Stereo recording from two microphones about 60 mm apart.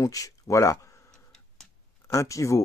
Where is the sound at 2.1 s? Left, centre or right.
Left.